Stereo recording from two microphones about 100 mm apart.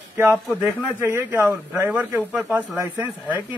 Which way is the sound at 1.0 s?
25° right (ahead or behind).